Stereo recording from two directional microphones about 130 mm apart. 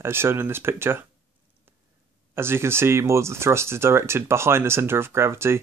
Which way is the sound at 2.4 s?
20° right (ahead or behind).